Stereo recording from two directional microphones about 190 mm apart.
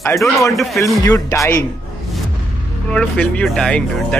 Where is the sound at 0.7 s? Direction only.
15° left (ahead or behind).